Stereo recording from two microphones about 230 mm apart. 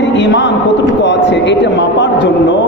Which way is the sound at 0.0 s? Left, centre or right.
Left.